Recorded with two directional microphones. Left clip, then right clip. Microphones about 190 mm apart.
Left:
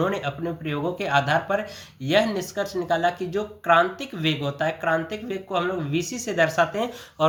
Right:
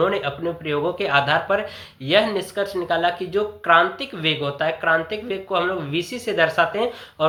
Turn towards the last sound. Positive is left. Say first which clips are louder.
# right 1 dB
turn(degrees=30)  # may be behind; listen again after turning